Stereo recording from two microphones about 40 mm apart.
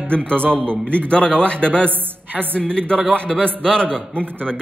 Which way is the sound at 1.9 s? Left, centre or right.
Right.